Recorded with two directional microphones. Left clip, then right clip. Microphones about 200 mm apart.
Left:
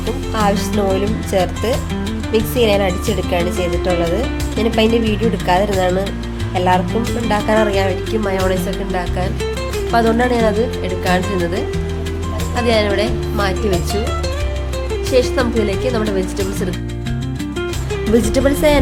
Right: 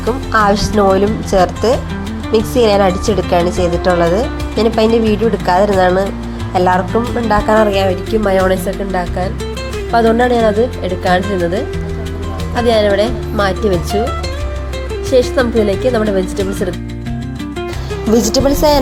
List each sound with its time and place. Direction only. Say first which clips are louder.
0.3 s speech: right 6 dB; 15° right (ahead or behind)
3.7 s speech: right 5 dB; centre (ahead or behind)
4.1 s speech: right 4 dB; 15° right (ahead or behind)
6.5 s music: right 3 dB; 15° right (ahead or behind)
7.3 s speech: right 4 dB; centre (ahead or behind)
7.7 s speech: right 4 dB; 15° right (ahead or behind)
8.9 s speech: right 3 dB; 5° right (ahead or behind)
12.5 s speech: right 4 dB; 15° right (ahead or behind)
15.4 s speech: right 4 dB; 15° right (ahead or behind)
18.1 s speech: right 3 dB; 5° right (ahead or behind)